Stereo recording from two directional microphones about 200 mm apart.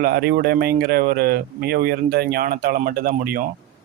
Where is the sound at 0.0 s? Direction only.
50° right (ahead or behind).